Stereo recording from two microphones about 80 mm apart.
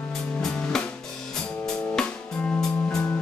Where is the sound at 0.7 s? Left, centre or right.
Centre.